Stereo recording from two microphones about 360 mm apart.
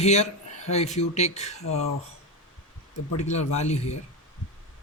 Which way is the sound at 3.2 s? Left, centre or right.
Centre.